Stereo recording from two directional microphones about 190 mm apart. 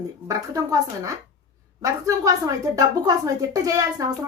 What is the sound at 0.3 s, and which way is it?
A woman's voice, 20° right (ahead or behind).